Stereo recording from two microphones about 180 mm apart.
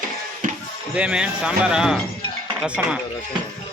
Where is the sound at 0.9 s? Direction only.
5° right (ahead or behind).